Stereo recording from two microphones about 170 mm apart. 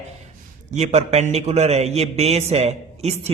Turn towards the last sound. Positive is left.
turn(degrees=-40)  # may be behind; listen again after turning